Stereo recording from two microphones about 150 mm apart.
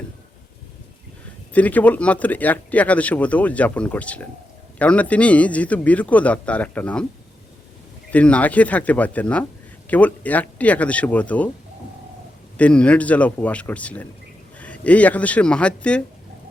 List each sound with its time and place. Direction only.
1.5 s speech: 10° left (ahead or behind)
8.1 s speech: 10° left (ahead or behind)
12.5 s speech: 10° left (ahead or behind)